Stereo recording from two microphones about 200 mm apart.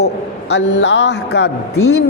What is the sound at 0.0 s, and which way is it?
A man's voice, 60° left (ahead or behind).